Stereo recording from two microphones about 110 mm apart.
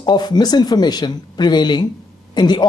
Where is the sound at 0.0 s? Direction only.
40° left (ahead or behind).